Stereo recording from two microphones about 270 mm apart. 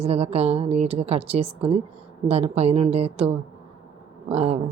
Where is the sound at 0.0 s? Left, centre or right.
Right.